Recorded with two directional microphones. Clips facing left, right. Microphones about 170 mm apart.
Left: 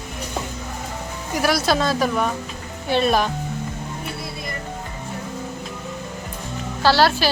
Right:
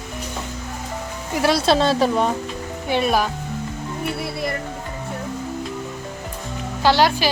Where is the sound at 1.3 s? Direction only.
25° right (ahead or behind).